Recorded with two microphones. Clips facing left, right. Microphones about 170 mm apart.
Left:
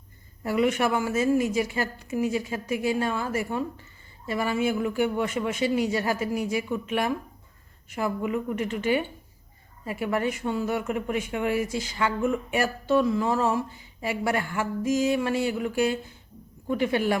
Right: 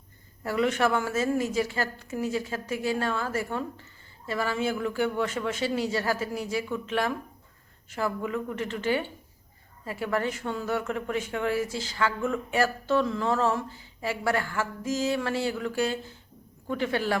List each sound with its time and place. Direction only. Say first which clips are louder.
0.4 s speech: left 2 dB; 10° left (ahead or behind)